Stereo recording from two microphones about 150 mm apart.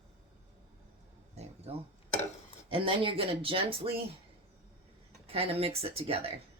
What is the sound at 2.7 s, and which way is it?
Speech, 35° right (ahead or behind).